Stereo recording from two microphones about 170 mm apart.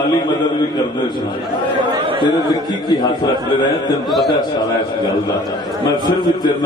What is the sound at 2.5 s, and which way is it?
A man's voice, 25° left (ahead or behind).